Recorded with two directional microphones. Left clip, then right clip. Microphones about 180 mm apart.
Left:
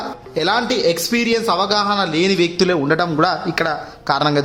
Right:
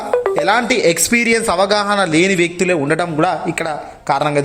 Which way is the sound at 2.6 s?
Centre (ahead or behind).